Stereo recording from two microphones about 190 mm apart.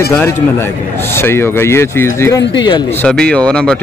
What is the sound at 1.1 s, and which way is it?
A man's voice, 10° left (ahead or behind).